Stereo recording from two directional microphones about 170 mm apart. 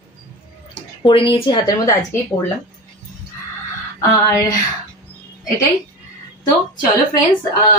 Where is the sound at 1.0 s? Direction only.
30° left (ahead or behind).